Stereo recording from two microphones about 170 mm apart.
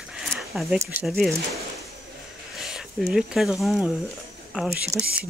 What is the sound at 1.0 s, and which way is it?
Speech, centre (ahead or behind).